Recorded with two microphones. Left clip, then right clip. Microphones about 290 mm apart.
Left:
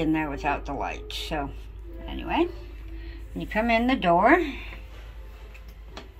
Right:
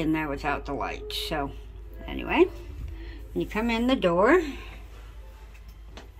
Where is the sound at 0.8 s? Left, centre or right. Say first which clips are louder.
Right 1 dB; centre.